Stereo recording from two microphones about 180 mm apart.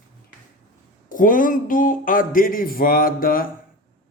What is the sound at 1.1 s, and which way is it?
Speech, 50° left (ahead or behind).